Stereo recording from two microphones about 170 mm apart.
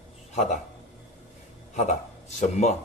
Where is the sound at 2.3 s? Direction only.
40° left (ahead or behind).